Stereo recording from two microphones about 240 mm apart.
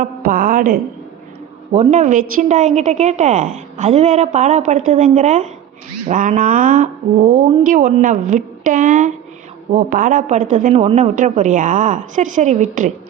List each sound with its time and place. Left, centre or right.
0.0 s a woman's voice: right